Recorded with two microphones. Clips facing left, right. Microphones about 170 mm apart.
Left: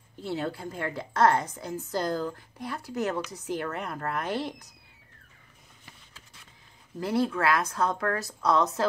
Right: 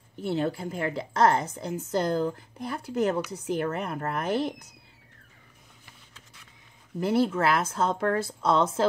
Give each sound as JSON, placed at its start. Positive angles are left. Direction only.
{"t": 0.2, "sound": "a woman's voice", "side_deg": -25}
{"t": 7.0, "sound": "a woman's voice", "side_deg": -25}